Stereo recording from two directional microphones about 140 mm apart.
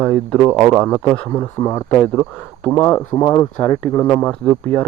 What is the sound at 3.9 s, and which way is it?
Speech, 15° left (ahead or behind).